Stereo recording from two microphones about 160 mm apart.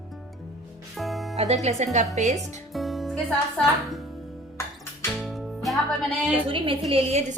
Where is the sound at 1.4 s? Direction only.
45° right (ahead or behind).